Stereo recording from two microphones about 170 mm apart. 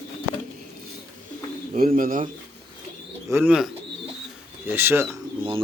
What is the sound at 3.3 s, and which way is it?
Speech, 10° right (ahead or behind).